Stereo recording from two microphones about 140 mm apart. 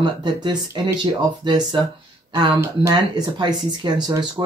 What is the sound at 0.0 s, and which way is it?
Speech, 35° right (ahead or behind).